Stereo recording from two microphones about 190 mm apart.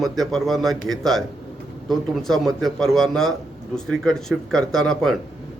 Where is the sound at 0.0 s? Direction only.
Centre (ahead or behind).